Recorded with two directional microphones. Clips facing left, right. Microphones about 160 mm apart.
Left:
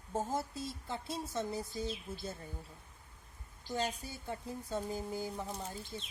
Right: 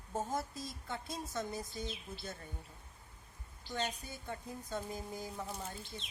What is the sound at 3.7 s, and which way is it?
A woman's voice, 35° left (ahead or behind).